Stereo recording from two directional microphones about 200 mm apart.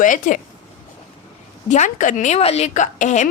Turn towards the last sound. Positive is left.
turn(degrees=35)  # may be behind; listen again after turning